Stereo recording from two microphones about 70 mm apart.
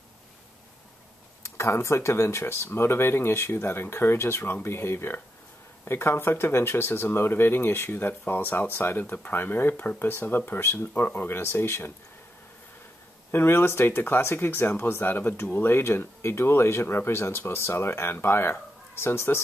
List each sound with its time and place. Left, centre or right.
1.4 s speech: left
13.3 s speech: left